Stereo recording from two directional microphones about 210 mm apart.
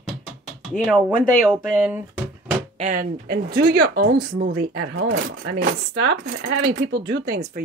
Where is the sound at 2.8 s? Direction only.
40° right (ahead or behind); by 7.4 s 55° right (ahead or behind).